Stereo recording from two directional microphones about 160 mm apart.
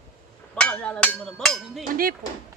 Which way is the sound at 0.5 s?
5° left (ahead or behind).